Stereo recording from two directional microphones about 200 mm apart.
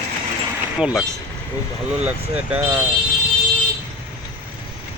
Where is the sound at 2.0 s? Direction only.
10° right (ahead or behind).